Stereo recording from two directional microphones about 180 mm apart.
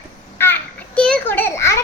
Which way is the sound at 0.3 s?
10° left (ahead or behind).